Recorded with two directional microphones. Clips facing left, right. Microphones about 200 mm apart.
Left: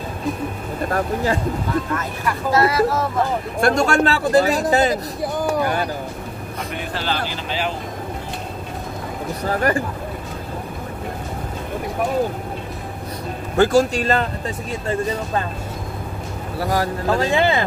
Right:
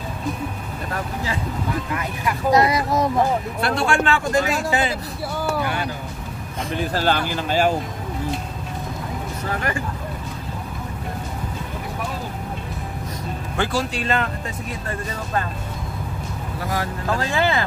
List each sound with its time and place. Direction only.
0.8 s speech: 45° left (ahead or behind)
2.0 s speech: 15° right (ahead or behind)
3.6 s speech: 40° left (ahead or behind)
5.2 s speech: 20° left (ahead or behind)
5.6 s speech: 45° left (ahead or behind)
6.7 s speech: 35° right (ahead or behind)
9.4 s speech: 40° left (ahead or behind)
13.6 s speech: 45° left (ahead or behind)
16.5 s speech: 35° left (ahead or behind)
17.2 s speech: 20° left (ahead or behind)